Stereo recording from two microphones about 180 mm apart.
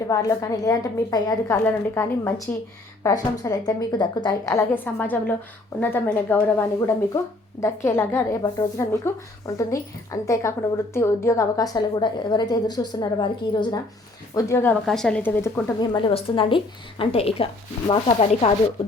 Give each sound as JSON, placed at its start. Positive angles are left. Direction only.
{"t": 0.1, "sound": "a woman's voice", "side_deg": 20}
{"t": 14.3, "sound": "speech", "side_deg": 15}
{"t": 15.4, "sound": "a woman's voice", "side_deg": 15}